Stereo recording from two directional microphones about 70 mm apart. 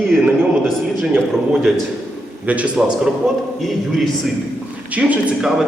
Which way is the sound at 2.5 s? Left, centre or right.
Centre.